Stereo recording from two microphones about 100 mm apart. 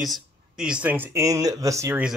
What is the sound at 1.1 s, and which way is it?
Speech, 35° right (ahead or behind).